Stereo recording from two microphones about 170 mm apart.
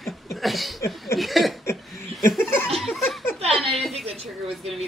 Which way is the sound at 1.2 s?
Centre (ahead or behind).